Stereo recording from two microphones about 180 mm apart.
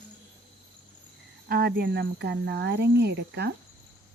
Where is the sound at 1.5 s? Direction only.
60° right (ahead or behind).